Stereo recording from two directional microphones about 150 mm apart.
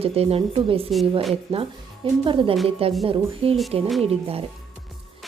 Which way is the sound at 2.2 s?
35° right (ahead or behind).